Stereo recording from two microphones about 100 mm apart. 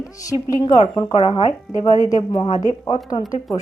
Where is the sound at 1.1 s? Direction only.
70° left (ahead or behind).